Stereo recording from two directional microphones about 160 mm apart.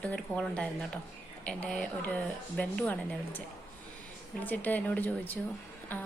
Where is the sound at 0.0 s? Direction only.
10° left (ahead or behind).